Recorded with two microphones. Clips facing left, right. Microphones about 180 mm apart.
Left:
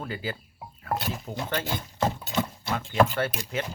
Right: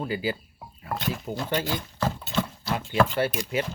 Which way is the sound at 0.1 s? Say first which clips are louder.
Right 5 dB; 10° right (ahead or behind).